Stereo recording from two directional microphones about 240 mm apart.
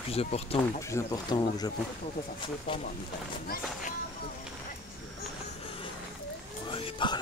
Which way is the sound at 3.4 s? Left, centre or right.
Left.